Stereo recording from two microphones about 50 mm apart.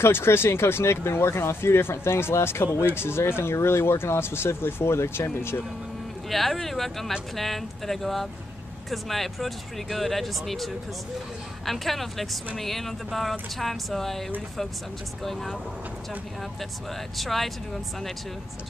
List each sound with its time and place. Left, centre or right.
0.0 s speech: left
6.3 s speech: centre
17.2 s speech: centre